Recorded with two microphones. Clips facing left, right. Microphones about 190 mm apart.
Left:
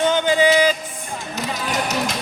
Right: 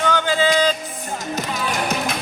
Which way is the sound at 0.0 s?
20° left (ahead or behind).